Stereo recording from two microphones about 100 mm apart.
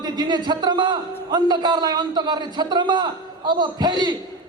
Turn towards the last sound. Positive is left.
turn(degrees=-45)  # may be behind; listen again after turning